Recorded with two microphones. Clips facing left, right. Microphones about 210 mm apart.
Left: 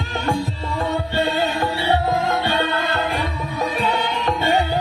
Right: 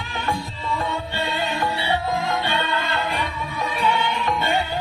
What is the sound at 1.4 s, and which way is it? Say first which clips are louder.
Music: left 3 dB; 45° left (ahead or behind).